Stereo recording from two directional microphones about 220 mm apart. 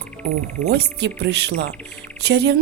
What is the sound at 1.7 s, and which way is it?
Speech, 5° left (ahead or behind).